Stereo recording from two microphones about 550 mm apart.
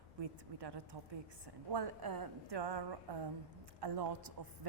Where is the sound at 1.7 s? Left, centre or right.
Right.